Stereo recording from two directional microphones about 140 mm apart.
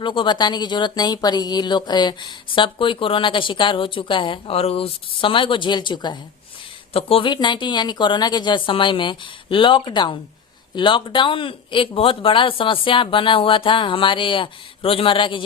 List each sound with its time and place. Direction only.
0.0 s speech: 35° left (ahead or behind)